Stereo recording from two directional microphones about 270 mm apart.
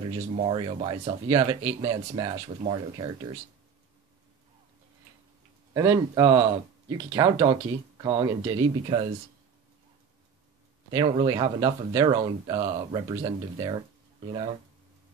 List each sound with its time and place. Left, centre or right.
0.0 s speech: right
5.7 s speech: centre
10.9 s speech: centre